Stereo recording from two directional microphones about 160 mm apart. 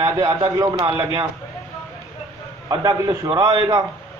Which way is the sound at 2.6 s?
25° right (ahead or behind).